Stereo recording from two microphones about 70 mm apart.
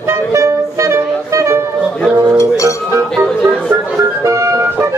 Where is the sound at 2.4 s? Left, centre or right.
Left.